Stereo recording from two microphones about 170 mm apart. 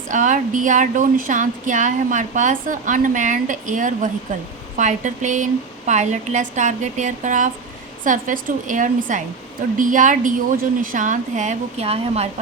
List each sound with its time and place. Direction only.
0.1 s speech: 50° right (ahead or behind)